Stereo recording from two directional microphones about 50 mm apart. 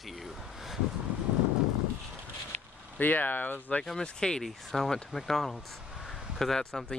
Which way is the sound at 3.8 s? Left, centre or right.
Centre.